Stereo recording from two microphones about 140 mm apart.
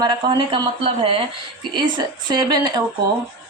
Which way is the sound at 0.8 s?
40° right (ahead or behind).